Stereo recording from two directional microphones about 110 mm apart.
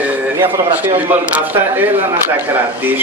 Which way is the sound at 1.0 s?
15° right (ahead or behind).